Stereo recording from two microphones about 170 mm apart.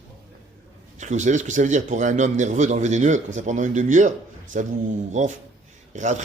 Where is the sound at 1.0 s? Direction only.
45° right (ahead or behind).